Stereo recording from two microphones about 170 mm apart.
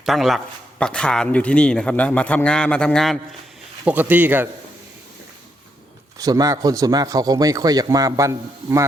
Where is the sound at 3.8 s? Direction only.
10° right (ahead or behind).